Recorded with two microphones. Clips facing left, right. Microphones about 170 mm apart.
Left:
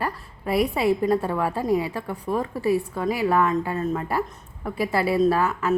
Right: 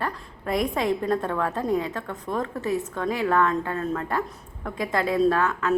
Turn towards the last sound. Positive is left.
turn(degrees=5)  # may be behind; listen again after turning